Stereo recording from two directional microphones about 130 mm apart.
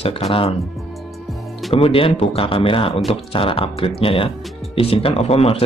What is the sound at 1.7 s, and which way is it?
Speech, 45° left (ahead or behind).